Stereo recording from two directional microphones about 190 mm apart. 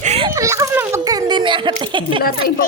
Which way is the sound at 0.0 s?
35° right (ahead or behind).